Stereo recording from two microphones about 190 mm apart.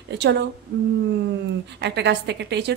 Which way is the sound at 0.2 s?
65° right (ahead or behind).